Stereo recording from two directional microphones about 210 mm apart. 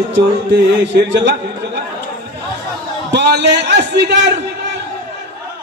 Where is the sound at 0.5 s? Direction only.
55° right (ahead or behind).